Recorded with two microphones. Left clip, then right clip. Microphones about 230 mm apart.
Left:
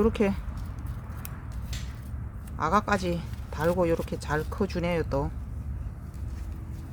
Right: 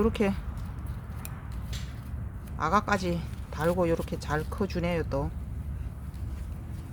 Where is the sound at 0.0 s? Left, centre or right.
Centre.